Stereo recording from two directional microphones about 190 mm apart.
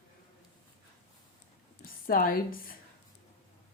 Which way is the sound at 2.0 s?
50° left (ahead or behind).